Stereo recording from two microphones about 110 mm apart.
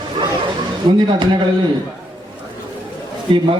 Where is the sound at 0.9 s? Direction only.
40° right (ahead or behind).